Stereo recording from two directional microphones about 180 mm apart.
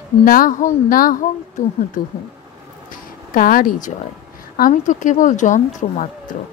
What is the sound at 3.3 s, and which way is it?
Speech, 50° left (ahead or behind).